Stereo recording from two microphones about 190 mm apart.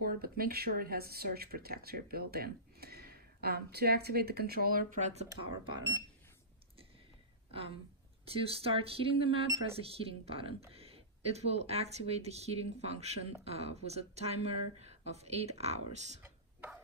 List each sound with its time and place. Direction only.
0.0 s speech: 50° right (ahead or behind)
5.3 s speech: 20° right (ahead or behind)
8.3 s speech: 30° right (ahead or behind)
16.2 s a sound: 10° right (ahead or behind)